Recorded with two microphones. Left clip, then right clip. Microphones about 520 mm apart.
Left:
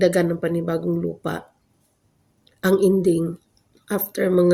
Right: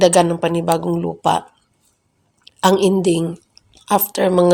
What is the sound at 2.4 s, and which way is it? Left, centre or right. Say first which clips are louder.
Speech: right 4 dB; left.